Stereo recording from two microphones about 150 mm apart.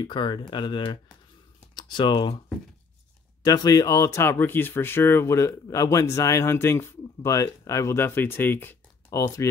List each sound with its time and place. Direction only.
0.0 s speech: 30° left (ahead or behind)
3.4 s speech: 25° left (ahead or behind)